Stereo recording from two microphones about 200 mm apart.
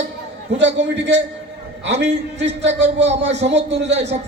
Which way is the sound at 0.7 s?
60° right (ahead or behind).